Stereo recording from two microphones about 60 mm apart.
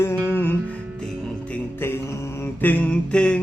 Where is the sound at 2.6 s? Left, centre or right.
Left.